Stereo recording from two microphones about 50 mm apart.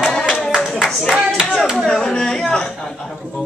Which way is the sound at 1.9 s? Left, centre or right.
Centre.